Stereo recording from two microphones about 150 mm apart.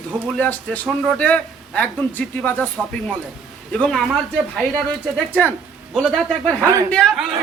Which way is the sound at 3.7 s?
5° left (ahead or behind).